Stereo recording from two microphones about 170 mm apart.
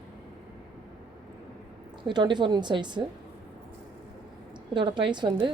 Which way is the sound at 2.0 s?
25° right (ahead or behind).